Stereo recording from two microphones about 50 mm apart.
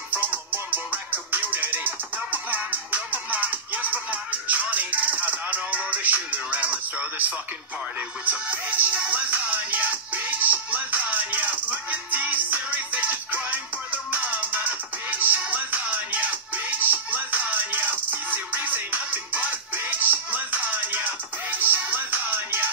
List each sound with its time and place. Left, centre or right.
0.1 s music: right